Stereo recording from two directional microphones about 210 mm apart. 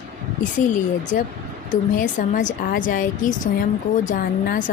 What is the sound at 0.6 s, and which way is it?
Speech, 35° left (ahead or behind).